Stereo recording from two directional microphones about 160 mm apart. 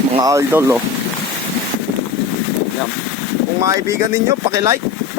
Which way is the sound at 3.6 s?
20° right (ahead or behind).